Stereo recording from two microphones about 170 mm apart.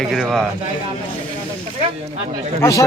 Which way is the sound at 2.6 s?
15° left (ahead or behind).